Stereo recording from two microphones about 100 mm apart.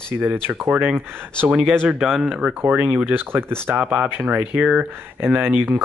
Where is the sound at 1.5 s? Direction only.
10° right (ahead or behind).